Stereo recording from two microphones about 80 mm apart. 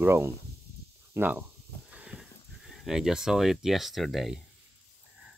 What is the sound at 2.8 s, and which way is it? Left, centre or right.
Speech, centre.